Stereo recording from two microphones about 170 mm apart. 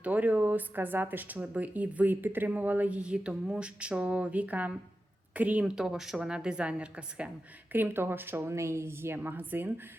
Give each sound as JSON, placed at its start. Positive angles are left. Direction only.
{"t": 0.0, "sound": "a woman's voice", "side_deg": -10}